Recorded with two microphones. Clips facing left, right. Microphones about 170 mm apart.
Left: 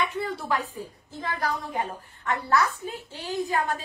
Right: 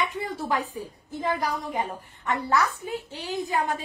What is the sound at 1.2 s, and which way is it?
A woman's voice, 15° right (ahead or behind).